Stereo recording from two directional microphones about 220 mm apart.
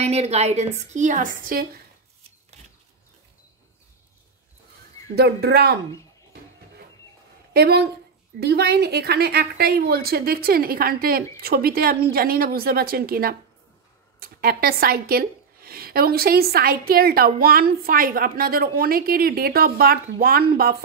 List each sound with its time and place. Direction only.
0.0 s a woman's voice: 30° right (ahead or behind)
5.1 s a woman's voice: 45° right (ahead or behind)
7.5 s a woman's voice: 50° right (ahead or behind)